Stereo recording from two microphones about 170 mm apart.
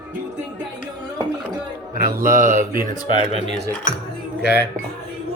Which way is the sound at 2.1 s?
50° right (ahead or behind).